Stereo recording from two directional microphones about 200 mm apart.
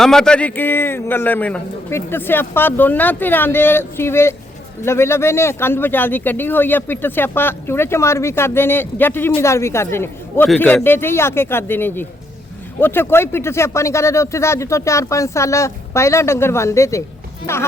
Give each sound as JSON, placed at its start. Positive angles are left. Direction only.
{"t": 0.0, "sound": "speech", "side_deg": 5}